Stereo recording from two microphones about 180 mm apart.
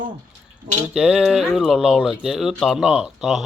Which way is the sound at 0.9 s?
5° right (ahead or behind).